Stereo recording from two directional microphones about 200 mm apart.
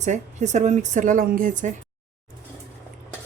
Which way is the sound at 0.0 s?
35° right (ahead or behind).